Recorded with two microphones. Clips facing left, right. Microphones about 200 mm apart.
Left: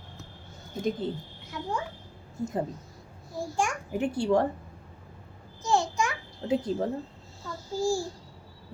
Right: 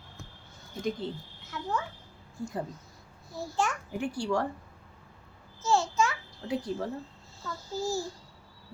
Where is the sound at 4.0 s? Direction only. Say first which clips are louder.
Left 6 dB; 20° left (ahead or behind).